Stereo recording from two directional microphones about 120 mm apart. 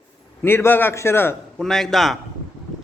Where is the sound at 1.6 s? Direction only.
5° left (ahead or behind).